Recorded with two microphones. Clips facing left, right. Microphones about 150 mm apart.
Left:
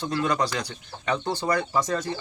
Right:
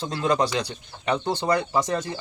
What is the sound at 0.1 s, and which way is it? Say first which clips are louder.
Speech: right 3 dB; 25° right (ahead or behind).